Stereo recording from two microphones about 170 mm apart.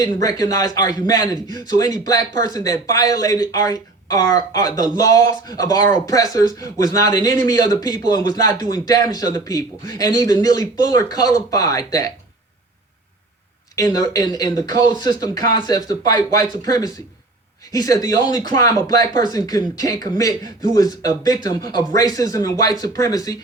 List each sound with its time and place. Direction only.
0.0 s a man's voice: 20° left (ahead or behind)
13.9 s a man's voice: 20° left (ahead or behind)